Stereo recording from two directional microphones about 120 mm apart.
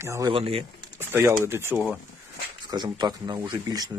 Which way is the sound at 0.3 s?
50° right (ahead or behind).